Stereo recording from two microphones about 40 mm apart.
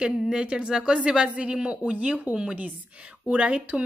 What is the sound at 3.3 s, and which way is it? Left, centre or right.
Speech, right.